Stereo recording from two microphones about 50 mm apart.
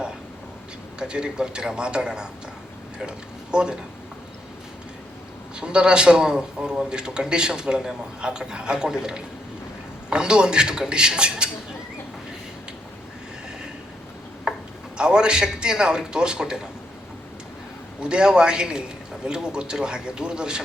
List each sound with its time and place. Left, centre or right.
0.9 s a man's voice: centre
5.5 s a man's voice: centre
14.5 s a sound: centre
14.9 s a man's voice: centre
18.0 s a man's voice: centre